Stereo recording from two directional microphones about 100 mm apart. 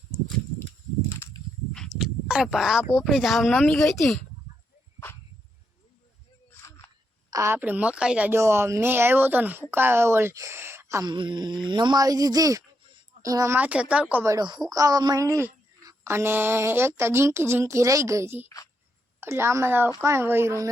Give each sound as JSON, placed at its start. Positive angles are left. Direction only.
{"t": 1.7, "sound": "a sound", "side_deg": 0}
{"t": 2.5, "sound": "speech", "side_deg": -5}
{"t": 6.5, "sound": "a sound", "side_deg": 25}
{"t": 7.3, "sound": "a sound", "side_deg": -35}
{"t": 7.5, "sound": "speech", "side_deg": -15}
{"t": 8.3, "sound": "a woman's voice", "side_deg": -25}
{"t": 11.0, "sound": "a woman's voice", "side_deg": -50}
{"t": 13.6, "sound": "speech", "side_deg": -15}
{"t": 14.7, "sound": "a woman's voice", "side_deg": -40}
{"t": 16.0, "sound": "speech", "side_deg": -25}